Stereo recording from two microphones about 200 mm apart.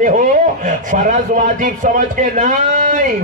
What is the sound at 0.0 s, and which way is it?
A man's voice, 40° right (ahead or behind).